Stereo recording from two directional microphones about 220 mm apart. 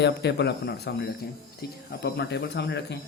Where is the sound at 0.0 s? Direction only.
50° left (ahead or behind).